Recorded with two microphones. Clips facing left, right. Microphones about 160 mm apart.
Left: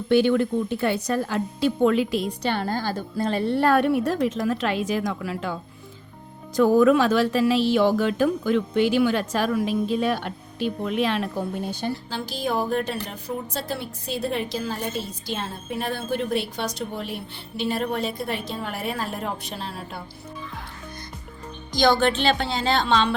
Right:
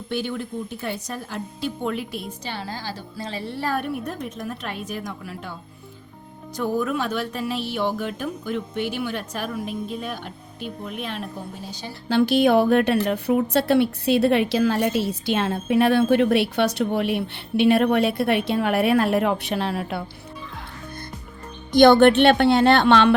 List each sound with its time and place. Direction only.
0.1 s speech: 75° left (ahead or behind)
2.4 s speech: 60° left (ahead or behind); by 5.5 s 90° left
6.6 s speech: 90° left
11.7 s speech: 55° left (ahead or behind)
12.0 s a woman's voice: 65° right (ahead or behind)
21.7 s speech: 60° right (ahead or behind)